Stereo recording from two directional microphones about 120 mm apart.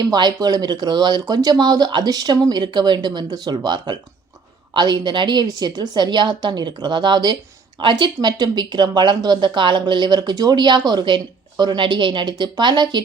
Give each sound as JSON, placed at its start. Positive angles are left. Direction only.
{"t": 0.0, "sound": "speech", "side_deg": -35}